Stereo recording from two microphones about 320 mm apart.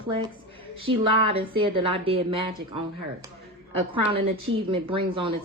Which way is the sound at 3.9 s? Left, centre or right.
Centre.